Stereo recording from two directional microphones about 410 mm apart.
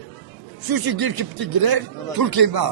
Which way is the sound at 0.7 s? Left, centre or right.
Right.